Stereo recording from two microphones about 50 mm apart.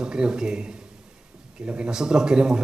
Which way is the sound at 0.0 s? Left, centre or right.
Centre.